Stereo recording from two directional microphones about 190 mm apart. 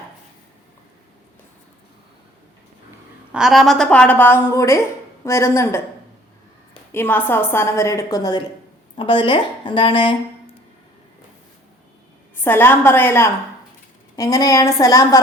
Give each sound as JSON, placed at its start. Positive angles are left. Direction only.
{"t": 3.3, "sound": "a woman's voice", "side_deg": 0}
{"t": 6.9, "sound": "a woman's voice", "side_deg": 10}
{"t": 12.4, "sound": "a woman's voice", "side_deg": 10}